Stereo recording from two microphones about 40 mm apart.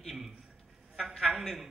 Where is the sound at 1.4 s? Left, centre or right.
Centre.